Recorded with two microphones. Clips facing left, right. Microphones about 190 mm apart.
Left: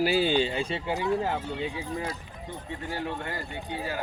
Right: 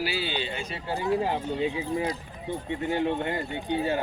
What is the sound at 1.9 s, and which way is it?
Speech, 20° right (ahead or behind).